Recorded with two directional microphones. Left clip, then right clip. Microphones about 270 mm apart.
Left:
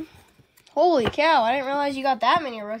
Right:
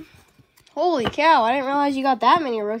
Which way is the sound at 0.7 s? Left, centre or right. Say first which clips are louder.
Left 2 dB; centre.